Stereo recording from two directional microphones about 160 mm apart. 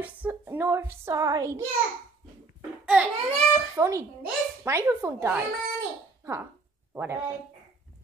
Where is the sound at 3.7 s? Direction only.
20° right (ahead or behind).